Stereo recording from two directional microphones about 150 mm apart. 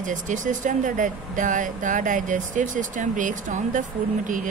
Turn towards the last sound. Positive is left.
turn(degrees=-60)  # may be behind; listen again after turning